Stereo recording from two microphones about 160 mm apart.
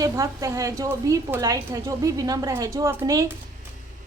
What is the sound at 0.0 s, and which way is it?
A woman's voice, 20° right (ahead or behind).